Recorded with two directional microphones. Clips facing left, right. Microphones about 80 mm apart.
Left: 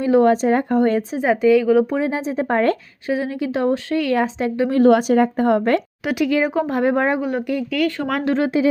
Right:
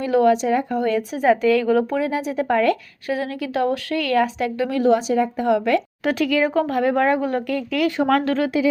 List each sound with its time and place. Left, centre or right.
0.0 s a woman's voice: left
1.2 s a woman's voice: centre
2.0 s speech: left
3.1 s speech: left
4.8 s a woman's voice: left
6.0 s a woman's voice: centre
6.7 s speech: left
7.2 s a woman's voice: centre
8.2 s speech: left